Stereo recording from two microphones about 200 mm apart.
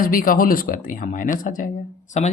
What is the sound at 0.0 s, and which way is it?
Speech, 45° left (ahead or behind).